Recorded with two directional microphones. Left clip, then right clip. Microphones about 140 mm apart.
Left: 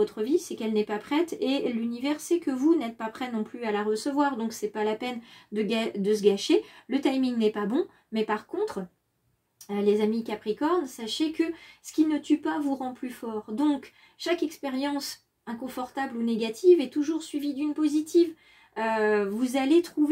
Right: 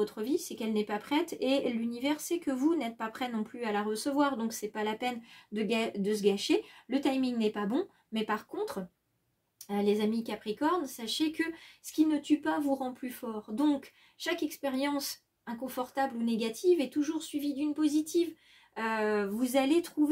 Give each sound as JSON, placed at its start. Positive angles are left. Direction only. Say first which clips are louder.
{"t": 0.0, "sound": "speech", "louder": "left 6 dB", "side_deg": -20}